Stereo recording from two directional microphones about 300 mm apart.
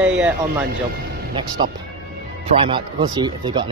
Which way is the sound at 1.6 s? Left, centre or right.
Centre.